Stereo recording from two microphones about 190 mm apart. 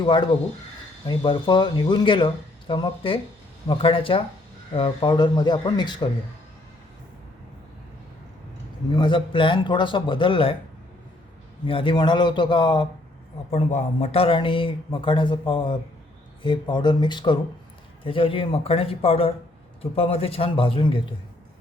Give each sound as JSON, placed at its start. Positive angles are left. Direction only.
{"t": 0.0, "sound": "speech", "side_deg": 25}
{"t": 8.9, "sound": "speech", "side_deg": 25}
{"t": 11.6, "sound": "speech", "side_deg": 25}
{"t": 13.5, "sound": "speech", "side_deg": 35}